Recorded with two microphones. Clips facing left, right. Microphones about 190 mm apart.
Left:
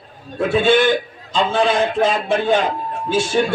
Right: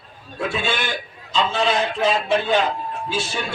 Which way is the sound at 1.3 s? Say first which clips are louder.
Left 4 dB; 50° left (ahead or behind).